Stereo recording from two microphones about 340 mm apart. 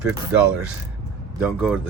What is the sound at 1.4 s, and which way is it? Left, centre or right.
Speech, centre.